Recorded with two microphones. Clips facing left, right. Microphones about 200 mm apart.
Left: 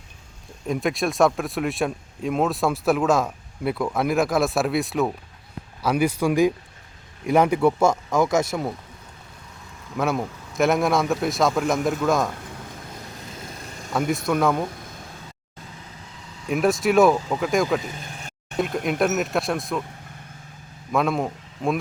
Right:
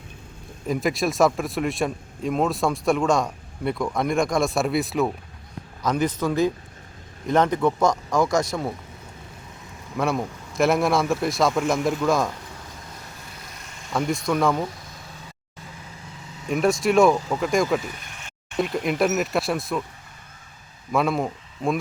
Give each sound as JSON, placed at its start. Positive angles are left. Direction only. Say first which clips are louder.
{"t": 0.7, "sound": "speech", "louder": "even", "side_deg": 0}
{"t": 10.0, "sound": "speech", "louder": "even", "side_deg": 0}
{"t": 13.6, "sound": "vehicle", "louder": "left 5 dB", "side_deg": 35}
{"t": 13.9, "sound": "speech", "louder": "left 1 dB", "side_deg": 5}
{"t": 16.5, "sound": "speech", "louder": "even", "side_deg": 0}
{"t": 20.9, "sound": "speech", "louder": "even", "side_deg": 0}